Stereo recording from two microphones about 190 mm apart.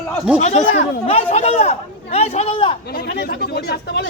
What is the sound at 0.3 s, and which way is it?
Speech, 35° left (ahead or behind).